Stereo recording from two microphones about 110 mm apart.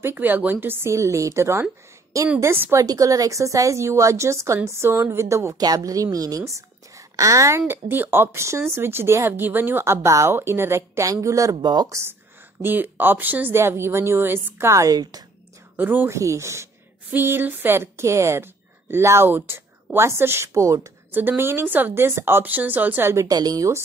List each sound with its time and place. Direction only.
0.0 s a woman's voice: 20° right (ahead or behind); by 12.0 s 40° right (ahead or behind)
12.6 s a woman's voice: 15° right (ahead or behind); by 15.2 s 35° right (ahead or behind)
15.7 s a woman's voice: 15° right (ahead or behind)
16.2 s a woman's voice: 25° right (ahead or behind)
23.2 s a woman's voice: 35° right (ahead or behind)